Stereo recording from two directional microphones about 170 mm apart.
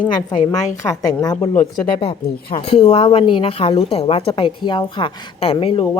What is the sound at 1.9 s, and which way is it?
A woman's voice, 30° left (ahead or behind).